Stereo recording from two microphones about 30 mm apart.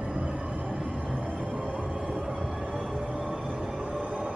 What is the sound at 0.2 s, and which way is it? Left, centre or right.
Train, right.